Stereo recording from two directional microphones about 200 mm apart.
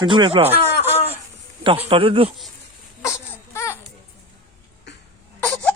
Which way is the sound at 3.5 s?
15° left (ahead or behind).